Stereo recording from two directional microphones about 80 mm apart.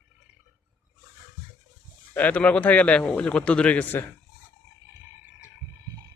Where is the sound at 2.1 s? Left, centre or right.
Centre.